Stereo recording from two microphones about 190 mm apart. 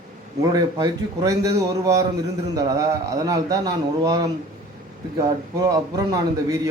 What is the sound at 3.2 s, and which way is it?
A man's voice, 20° right (ahead or behind).